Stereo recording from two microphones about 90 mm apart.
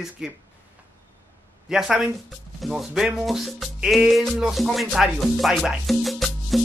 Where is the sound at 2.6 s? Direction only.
Centre (ahead or behind).